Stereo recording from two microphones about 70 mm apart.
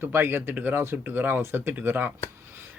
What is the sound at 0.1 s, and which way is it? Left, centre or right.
Speech, right.